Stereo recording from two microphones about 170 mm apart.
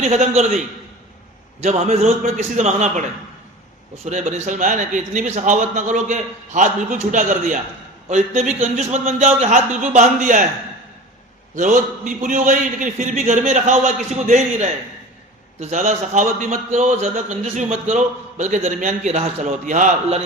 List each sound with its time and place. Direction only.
0.0 s a man's voice: 40° right (ahead or behind)
1.6 s a man's voice: 40° right (ahead or behind)
11.5 s a man's voice: 50° right (ahead or behind)